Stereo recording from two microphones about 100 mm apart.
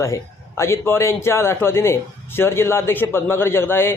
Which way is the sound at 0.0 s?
30° left (ahead or behind).